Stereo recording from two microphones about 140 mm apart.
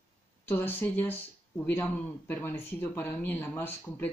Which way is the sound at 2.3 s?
15° left (ahead or behind).